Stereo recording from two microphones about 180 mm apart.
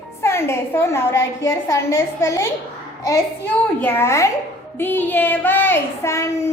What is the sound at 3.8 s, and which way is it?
Speech, 10° left (ahead or behind).